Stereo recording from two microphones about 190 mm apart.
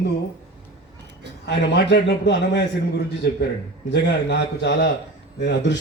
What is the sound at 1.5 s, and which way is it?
A man's voice, 65° left (ahead or behind).